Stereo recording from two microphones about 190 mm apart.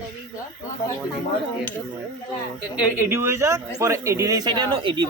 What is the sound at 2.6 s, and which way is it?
Speech, 10° right (ahead or behind).